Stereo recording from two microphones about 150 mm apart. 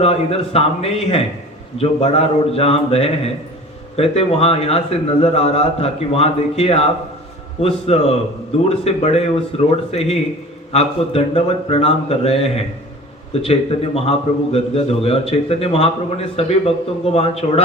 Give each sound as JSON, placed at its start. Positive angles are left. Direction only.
{"t": 0.0, "sound": "a man's voice", "side_deg": 40}
{"t": 7.9, "sound": "a man's voice", "side_deg": 45}